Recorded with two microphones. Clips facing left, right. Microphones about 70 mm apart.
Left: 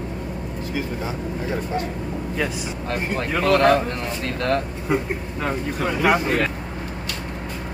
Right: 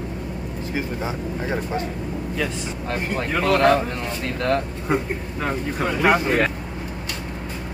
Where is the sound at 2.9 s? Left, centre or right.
Centre.